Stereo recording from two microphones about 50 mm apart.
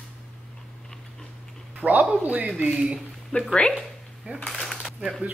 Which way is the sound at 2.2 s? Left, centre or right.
Right.